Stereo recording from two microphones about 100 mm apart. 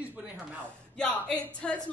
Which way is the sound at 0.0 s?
15° right (ahead or behind).